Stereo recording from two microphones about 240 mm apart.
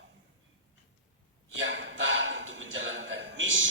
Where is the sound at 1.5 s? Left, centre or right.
Right.